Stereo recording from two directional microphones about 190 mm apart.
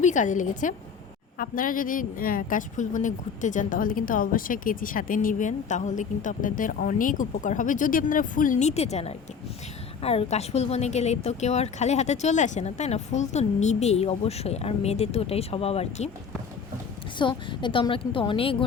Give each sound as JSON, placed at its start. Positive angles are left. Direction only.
{"t": 0.0, "sound": "a woman's voice", "side_deg": 40}
{"t": 17.2, "sound": "a woman's voice", "side_deg": 25}